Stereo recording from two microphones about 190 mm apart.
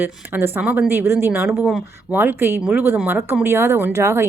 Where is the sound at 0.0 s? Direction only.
10° right (ahead or behind).